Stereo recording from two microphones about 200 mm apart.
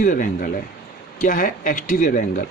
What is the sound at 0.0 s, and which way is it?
Speech, 40° left (ahead or behind).